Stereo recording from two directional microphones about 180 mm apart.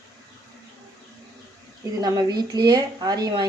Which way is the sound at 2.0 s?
20° right (ahead or behind).